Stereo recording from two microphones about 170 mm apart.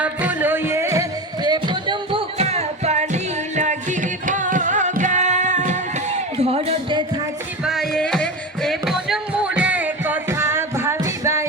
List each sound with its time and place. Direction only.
0.0 s music: 10° right (ahead or behind); by 7.0 s 35° right (ahead or behind)
7.6 s music: centre (ahead or behind); by 11.4 s 15° right (ahead or behind)